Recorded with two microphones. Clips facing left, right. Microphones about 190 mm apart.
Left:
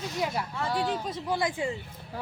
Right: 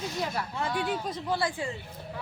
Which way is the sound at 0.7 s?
35° left (ahead or behind).